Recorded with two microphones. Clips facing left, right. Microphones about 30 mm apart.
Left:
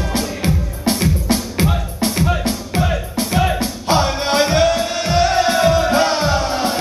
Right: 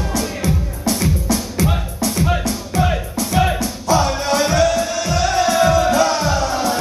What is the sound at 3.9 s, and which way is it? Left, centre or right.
Music, left.